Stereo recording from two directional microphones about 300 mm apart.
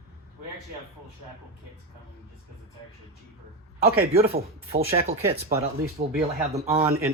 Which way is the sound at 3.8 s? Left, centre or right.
Right.